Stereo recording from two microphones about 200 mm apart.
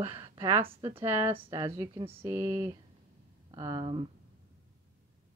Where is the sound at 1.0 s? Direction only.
10° right (ahead or behind).